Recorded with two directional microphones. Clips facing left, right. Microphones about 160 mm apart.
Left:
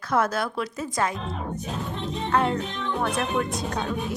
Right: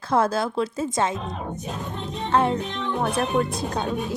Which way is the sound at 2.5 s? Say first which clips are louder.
Right 2 dB; 15° right (ahead or behind).